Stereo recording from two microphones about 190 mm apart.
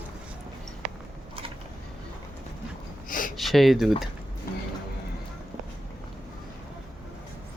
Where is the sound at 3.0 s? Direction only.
45° left (ahead or behind).